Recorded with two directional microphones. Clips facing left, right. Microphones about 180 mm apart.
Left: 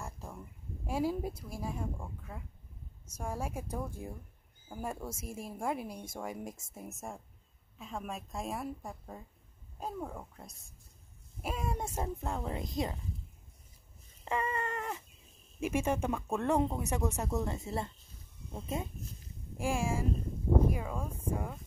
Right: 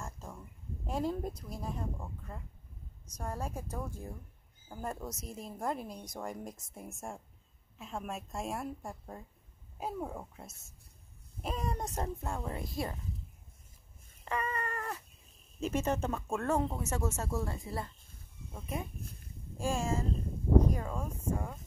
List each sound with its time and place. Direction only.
0.0 s a sound: 15° left (ahead or behind)
0.8 s a woman's voice: 5° left (ahead or behind)
14.2 s cat: 25° left (ahead or behind)
15.6 s a woman's voice: 10° left (ahead or behind); by 18.9 s 25° left (ahead or behind)
18.9 s speech: 55° right (ahead or behind)
19.6 s speech: 10° left (ahead or behind)